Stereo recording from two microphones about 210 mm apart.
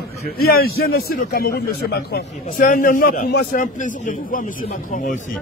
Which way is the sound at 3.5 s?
35° left (ahead or behind).